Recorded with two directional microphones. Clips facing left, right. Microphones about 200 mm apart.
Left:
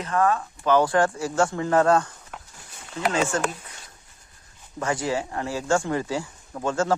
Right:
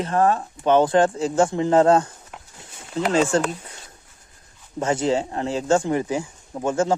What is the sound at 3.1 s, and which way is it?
Speech, 30° right (ahead or behind).